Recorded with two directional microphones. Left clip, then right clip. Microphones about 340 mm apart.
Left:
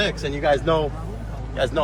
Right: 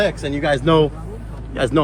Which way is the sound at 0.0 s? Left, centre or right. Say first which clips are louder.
Right 3 dB; right.